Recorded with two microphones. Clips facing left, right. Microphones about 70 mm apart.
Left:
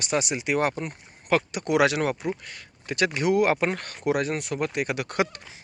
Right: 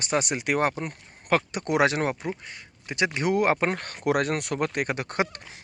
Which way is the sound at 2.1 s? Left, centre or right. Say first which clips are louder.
Left 2 dB; centre.